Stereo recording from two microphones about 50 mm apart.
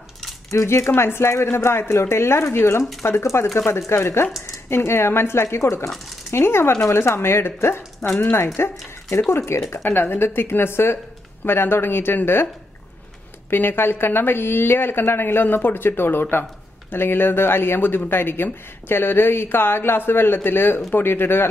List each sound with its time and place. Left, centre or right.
0.5 s speech: left
3.0 s speech: left
3.5 s speech: left
6.3 s speech: left
9.8 s speech: left
13.5 s speech: left